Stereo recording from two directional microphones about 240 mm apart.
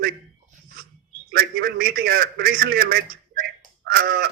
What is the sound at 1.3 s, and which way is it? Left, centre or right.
A man's voice, right.